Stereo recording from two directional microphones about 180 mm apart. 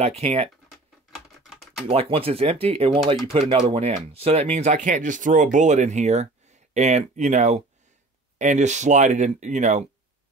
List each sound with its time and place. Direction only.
0.0 s speech: 35° right (ahead or behind)
1.4 s typing: centre (ahead or behind)
1.9 s speech: 30° right (ahead or behind)